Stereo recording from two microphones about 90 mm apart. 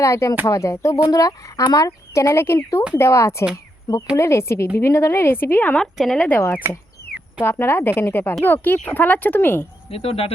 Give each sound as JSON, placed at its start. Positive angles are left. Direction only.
{"t": 0.0, "sound": "speech", "side_deg": 35}
{"t": 3.5, "sound": "a sound", "side_deg": 40}
{"t": 4.2, "sound": "a woman's voice", "side_deg": 30}
{"t": 5.7, "sound": "speech", "side_deg": 5}
{"t": 6.2, "sound": "a woman's voice", "side_deg": 20}
{"t": 9.9, "sound": "speech", "side_deg": 90}